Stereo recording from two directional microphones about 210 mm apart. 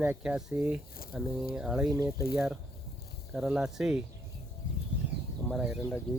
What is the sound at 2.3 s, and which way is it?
Speech, 5° right (ahead or behind).